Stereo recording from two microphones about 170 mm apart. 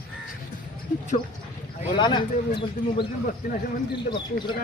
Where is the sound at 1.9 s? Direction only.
25° left (ahead or behind).